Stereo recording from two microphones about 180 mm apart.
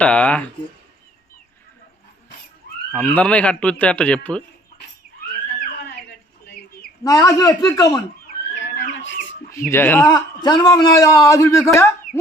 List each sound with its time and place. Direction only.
0.0 s speech: 5° left (ahead or behind)
2.9 s speech: 5° left (ahead or behind)
5.5 s a sound: 65° left (ahead or behind)
7.0 s a man's voice: 20° left (ahead or behind)
8.5 s a sound: 90° left
9.5 s speech: 15° left (ahead or behind)
10.1 s a man's voice: 25° left (ahead or behind)